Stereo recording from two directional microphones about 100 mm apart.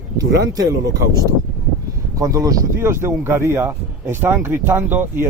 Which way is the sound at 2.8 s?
25° right (ahead or behind).